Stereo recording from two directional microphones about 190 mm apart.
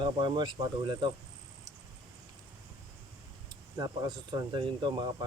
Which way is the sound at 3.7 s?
20° right (ahead or behind).